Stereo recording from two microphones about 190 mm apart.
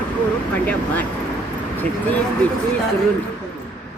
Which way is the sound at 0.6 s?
10° left (ahead or behind).